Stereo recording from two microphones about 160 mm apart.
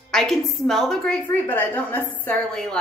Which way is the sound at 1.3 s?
10° left (ahead or behind).